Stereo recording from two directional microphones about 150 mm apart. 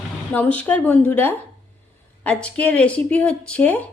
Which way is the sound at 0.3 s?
10° left (ahead or behind).